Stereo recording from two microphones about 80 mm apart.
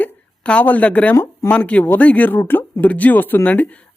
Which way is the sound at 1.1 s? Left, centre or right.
Left.